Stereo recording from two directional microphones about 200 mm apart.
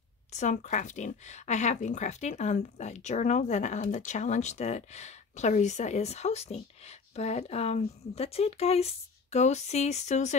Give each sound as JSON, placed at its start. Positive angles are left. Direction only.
{"t": 0.3, "sound": "speech", "side_deg": 35}